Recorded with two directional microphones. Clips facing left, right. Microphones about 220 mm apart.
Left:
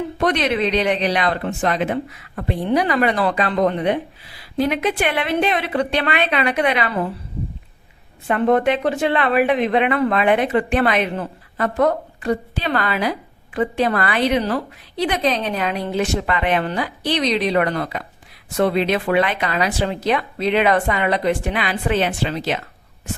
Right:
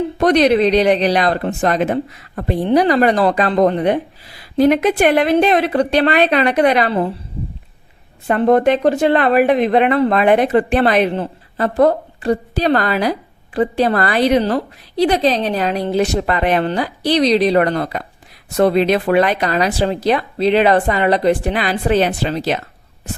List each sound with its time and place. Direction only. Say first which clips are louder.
0.2 s speech: right 7 dB; 40° right (ahead or behind)
8.3 s speech: right 4 dB; 40° right (ahead or behind)